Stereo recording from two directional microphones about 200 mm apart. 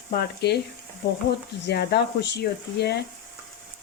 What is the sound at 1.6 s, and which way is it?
Speech, 55° left (ahead or behind).